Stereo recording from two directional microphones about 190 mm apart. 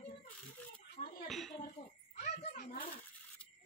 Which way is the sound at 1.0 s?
40° left (ahead or behind).